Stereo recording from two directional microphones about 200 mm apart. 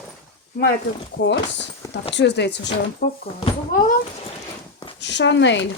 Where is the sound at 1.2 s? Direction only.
60° left (ahead or behind).